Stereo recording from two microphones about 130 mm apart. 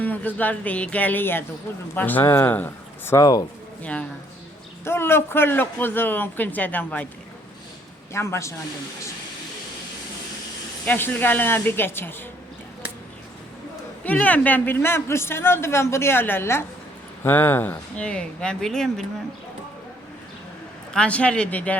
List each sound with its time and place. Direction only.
0.0 s a man's voice: 15° left (ahead or behind)
4.9 s a man's voice: 20° left (ahead or behind)
8.1 s a man's voice: 20° left (ahead or behind)
10.8 s a man's voice: 15° left (ahead or behind)
14.0 s a man's voice: 10° left (ahead or behind)
20.9 s a man's voice: 10° left (ahead or behind)